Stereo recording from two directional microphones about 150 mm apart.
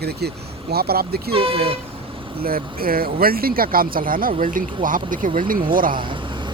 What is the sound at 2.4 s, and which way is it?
Speech, 80° right.